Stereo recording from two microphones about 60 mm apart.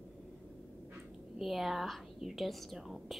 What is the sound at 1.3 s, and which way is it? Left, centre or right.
A woman's voice, centre.